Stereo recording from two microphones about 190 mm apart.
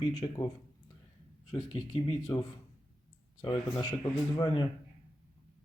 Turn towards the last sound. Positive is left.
turn(degrees=25)  # may be behind; listen again after turning